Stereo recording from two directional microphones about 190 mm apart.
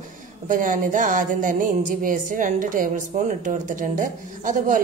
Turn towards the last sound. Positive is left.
turn(degrees=-40)  # may be behind; listen again after turning